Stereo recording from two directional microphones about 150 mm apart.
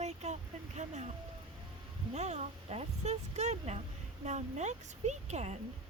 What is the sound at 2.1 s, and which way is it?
Speech, 45° right (ahead or behind).